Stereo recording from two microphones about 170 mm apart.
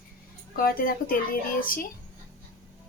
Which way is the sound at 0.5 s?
60° left (ahead or behind).